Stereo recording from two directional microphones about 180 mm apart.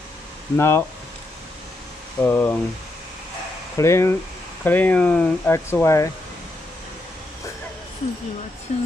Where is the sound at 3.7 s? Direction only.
15° left (ahead or behind).